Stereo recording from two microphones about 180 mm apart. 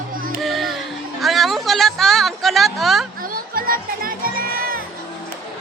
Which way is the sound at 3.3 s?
50° right (ahead or behind).